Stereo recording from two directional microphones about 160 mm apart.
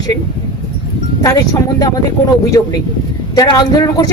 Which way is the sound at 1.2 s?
25° left (ahead or behind).